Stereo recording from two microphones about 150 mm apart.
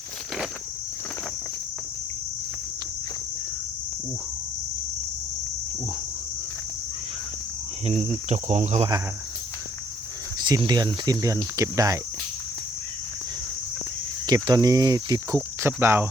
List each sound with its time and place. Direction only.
7.9 s cricket: 50° right (ahead or behind)
10.4 s speech: 30° right (ahead or behind)
14.3 s speech: 25° right (ahead or behind)